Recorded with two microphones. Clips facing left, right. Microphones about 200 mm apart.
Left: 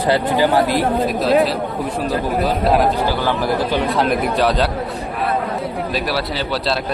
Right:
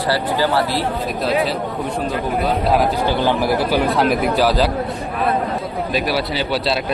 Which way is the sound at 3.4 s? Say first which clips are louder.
Right 1 dB; 5° right (ahead or behind).